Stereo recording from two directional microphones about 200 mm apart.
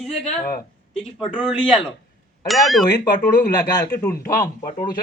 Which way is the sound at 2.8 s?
20° left (ahead or behind).